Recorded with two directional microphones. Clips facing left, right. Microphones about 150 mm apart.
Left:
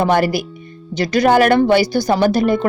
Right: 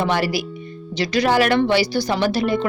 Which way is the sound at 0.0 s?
50° left (ahead or behind).